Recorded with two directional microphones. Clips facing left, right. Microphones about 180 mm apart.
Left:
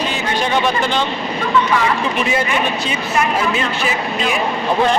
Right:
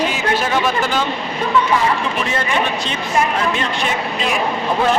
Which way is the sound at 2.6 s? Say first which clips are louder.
Left 1 dB; 5° left (ahead or behind).